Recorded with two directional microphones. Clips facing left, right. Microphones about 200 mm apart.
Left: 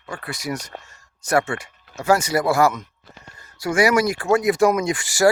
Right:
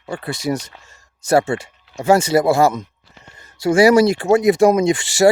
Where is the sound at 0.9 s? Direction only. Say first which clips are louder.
Right 5 dB; 30° right (ahead or behind).